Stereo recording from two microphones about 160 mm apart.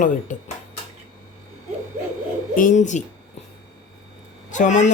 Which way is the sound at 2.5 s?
50° left (ahead or behind).